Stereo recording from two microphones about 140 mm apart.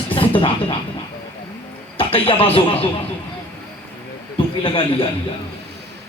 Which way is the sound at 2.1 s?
40° left (ahead or behind).